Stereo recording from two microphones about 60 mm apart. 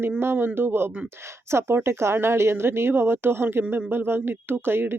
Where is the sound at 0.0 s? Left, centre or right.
Right.